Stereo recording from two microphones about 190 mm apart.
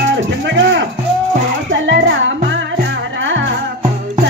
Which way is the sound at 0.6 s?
70° right (ahead or behind).